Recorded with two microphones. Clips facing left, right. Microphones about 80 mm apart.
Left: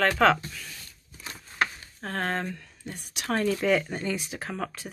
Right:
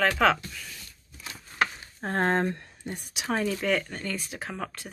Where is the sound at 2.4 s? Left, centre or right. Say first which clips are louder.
Right 6 dB; right.